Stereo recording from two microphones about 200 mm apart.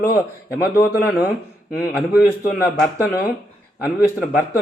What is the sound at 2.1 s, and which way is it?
Speech, 15° left (ahead or behind).